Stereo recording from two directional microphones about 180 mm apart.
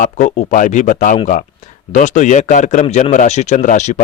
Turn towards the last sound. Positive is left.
turn(degrees=45)  # may be behind; listen again after turning